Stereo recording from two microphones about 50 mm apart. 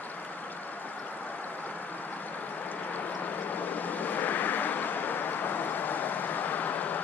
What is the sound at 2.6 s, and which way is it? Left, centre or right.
Vehicle, left.